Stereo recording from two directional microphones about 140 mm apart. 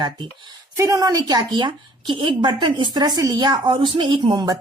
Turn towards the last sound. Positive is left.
turn(degrees=-30)  # may be behind; listen again after turning